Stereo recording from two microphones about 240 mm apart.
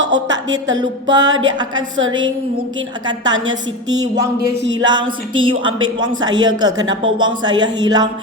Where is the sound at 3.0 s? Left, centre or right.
Centre.